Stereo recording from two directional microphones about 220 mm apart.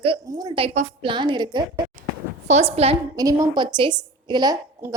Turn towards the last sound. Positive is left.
turn(degrees=-20)  # may be behind; listen again after turning